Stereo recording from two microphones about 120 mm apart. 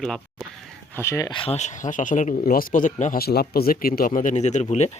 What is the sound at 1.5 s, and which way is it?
Speech, 80° left.